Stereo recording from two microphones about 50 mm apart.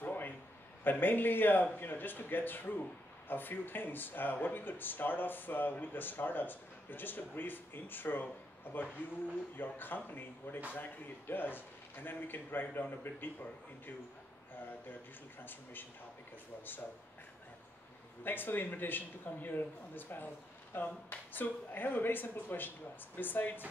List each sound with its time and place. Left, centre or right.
0.0 s a sound: left
0.8 s speech: left
15.4 s speech: left
18.2 s speech: left